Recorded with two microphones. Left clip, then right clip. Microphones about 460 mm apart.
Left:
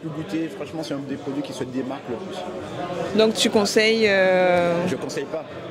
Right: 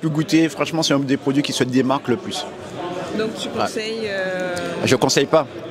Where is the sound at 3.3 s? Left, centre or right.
Left.